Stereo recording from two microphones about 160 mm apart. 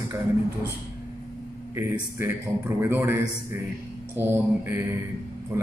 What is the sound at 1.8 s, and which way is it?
A man's voice, 15° right (ahead or behind).